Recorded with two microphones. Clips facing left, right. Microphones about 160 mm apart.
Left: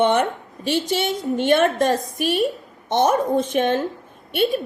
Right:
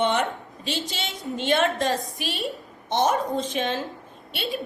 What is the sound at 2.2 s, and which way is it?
A woman's voice, 45° left (ahead or behind).